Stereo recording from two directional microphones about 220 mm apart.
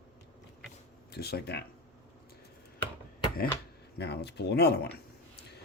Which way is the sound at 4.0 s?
50° left (ahead or behind).